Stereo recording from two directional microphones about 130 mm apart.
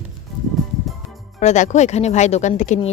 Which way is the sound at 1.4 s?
65° left (ahead or behind).